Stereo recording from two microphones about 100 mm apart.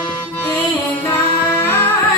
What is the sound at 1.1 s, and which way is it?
Music, 20° left (ahead or behind).